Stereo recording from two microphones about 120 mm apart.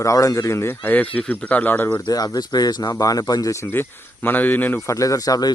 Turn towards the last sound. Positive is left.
turn(degrees=30)  # may be behind; listen again after turning